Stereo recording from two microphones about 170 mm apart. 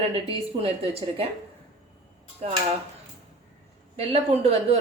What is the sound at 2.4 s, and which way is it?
Speech, 40° right (ahead or behind).